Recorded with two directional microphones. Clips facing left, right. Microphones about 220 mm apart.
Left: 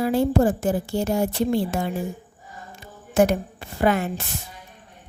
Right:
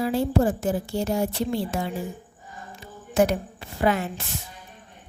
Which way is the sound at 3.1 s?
50° left (ahead or behind).